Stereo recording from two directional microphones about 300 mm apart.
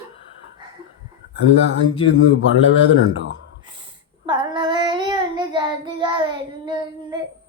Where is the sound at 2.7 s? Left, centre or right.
Left.